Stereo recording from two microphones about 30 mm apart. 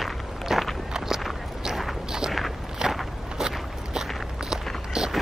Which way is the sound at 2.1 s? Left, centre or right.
Right.